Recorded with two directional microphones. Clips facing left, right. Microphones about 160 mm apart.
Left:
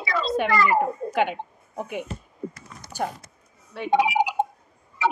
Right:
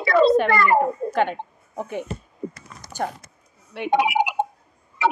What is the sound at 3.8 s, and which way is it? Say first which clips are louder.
Speech: right 1 dB; 65° right (ahead or behind).